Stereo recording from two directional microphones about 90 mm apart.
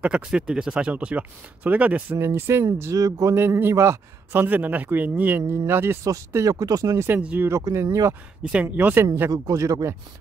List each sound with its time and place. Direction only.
0.0 s speech: 10° right (ahead or behind)
2.1 s speech: 30° right (ahead or behind)
3.3 s a man's voice: 25° right (ahead or behind)
6.0 s speech: 40° right (ahead or behind)
7.0 s a man's voice: 25° right (ahead or behind)
7.7 s speech: 35° right (ahead or behind)
8.5 s a man's voice: 20° right (ahead or behind)
9.3 s speech: 40° right (ahead or behind)